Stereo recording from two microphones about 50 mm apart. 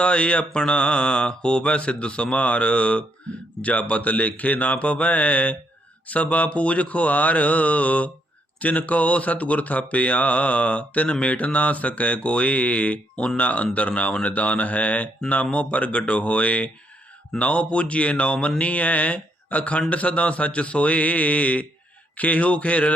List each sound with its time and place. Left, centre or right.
0.0 s speech: left